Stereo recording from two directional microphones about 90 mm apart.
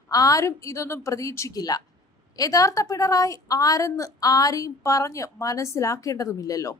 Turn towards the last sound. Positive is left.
turn(degrees=40)  # may be behind; listen again after turning